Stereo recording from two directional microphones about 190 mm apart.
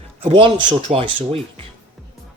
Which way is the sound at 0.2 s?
25° right (ahead or behind).